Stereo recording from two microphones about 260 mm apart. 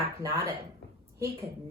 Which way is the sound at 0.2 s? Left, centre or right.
Centre.